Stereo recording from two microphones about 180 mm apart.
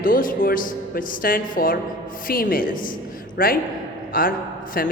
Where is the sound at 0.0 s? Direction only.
50° left (ahead or behind).